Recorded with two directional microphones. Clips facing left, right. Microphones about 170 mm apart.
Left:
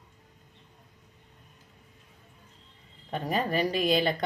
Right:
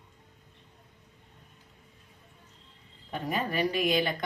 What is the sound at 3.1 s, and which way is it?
A woman's voice, 35° left (ahead or behind).